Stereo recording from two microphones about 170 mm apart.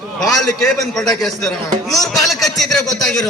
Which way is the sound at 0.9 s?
Centre (ahead or behind).